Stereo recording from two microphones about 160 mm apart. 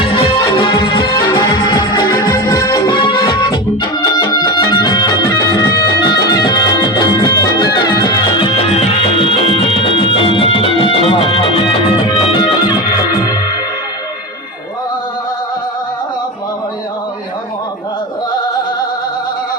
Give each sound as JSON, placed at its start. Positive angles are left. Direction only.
{"t": 0.0, "sound": "music", "side_deg": 35}